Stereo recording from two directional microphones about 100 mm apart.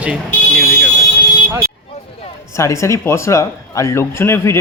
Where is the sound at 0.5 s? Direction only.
5° right (ahead or behind).